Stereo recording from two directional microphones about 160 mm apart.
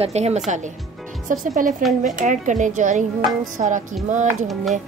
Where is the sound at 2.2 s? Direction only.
50° right (ahead or behind).